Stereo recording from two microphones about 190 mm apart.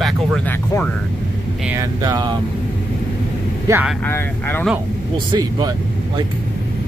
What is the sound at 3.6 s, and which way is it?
Speech, 10° right (ahead or behind).